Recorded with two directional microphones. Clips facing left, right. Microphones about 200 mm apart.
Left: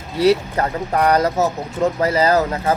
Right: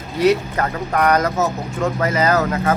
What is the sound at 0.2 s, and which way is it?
Speech, 30° left (ahead or behind).